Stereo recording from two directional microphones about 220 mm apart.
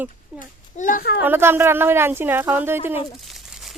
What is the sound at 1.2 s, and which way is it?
Speech, 10° right (ahead or behind).